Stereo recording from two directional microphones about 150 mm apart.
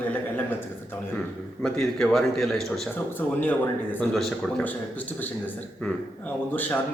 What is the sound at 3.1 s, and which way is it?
A man's voice, 10° left (ahead or behind).